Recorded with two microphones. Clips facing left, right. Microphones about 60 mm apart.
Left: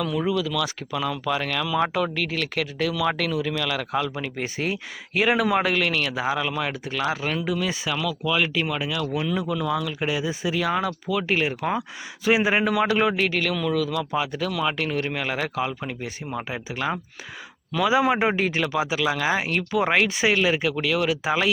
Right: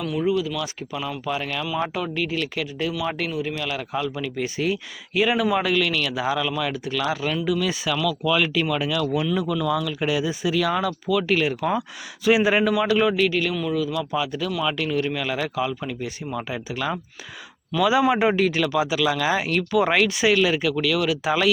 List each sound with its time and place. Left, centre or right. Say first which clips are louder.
0.2 s speech: right 4 dB; left
4.2 s speech: right 2 dB; left
7.6 s speech: right 3 dB; left
9.3 s speech: right 2 dB; left
12.7 s a man's voice: right 1 dB; left
13.4 s speech: even; left
14.0 s a man's voice: even; left
18.1 s speech: right 2 dB; left